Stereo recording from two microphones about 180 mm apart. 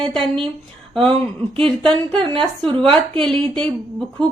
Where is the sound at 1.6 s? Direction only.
5° left (ahead or behind).